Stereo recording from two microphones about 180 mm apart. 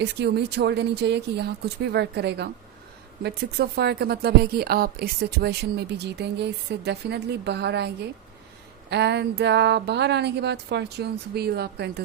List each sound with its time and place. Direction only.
0.0 s speech: 70° right (ahead or behind)